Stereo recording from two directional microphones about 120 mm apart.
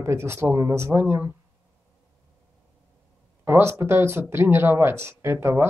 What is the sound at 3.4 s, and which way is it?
Speech, 20° right (ahead or behind).